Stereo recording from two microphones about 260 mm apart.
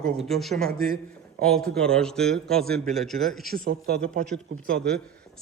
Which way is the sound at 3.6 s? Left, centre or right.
Right.